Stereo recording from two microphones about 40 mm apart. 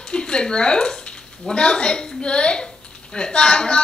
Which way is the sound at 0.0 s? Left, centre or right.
Left.